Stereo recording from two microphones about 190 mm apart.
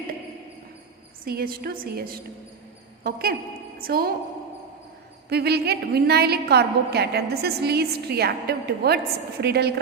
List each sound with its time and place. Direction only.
1.2 s a woman's voice: 50° right (ahead or behind)
5.3 s a woman's voice: 60° right (ahead or behind)